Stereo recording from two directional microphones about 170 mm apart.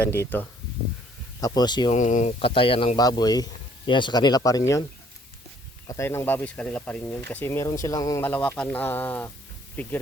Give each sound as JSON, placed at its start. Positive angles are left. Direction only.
{"t": 0.2, "sound": "speech", "side_deg": 10}
{"t": 1.9, "sound": "speech", "side_deg": 45}
{"t": 5.9, "sound": "speech", "side_deg": 15}